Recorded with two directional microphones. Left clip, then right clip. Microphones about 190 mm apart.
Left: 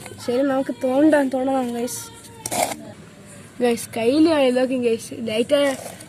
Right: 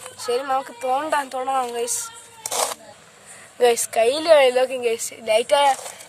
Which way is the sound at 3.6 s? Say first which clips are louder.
Right 3 dB; 65° right (ahead or behind).